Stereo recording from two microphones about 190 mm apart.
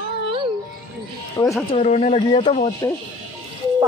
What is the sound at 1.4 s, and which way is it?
Speech, 20° left (ahead or behind).